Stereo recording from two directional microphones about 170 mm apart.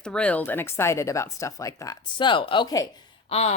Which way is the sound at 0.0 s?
5° left (ahead or behind).